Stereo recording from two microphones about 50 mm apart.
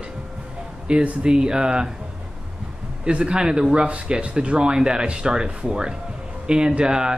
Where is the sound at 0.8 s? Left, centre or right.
Centre.